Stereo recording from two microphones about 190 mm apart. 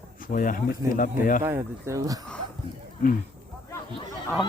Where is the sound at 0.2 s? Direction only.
45° left (ahead or behind).